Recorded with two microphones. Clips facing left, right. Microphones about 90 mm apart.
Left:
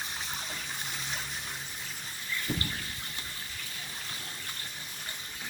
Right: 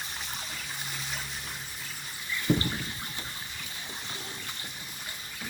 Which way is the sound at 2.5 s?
60° right (ahead or behind).